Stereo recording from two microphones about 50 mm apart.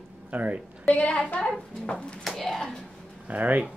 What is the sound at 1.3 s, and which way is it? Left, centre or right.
Speech, centre.